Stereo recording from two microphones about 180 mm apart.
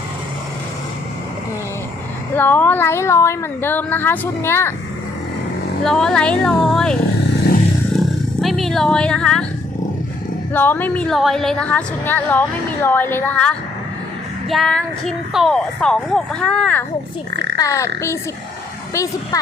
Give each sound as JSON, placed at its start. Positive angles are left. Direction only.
{"t": 2.3, "sound": "a woman's voice", "side_deg": 10}
{"t": 5.8, "sound": "speech", "side_deg": 5}
{"t": 7.9, "sound": "roar", "side_deg": 0}
{"t": 8.4, "sound": "speech", "side_deg": 0}
{"t": 10.5, "sound": "a woman's voice", "side_deg": 10}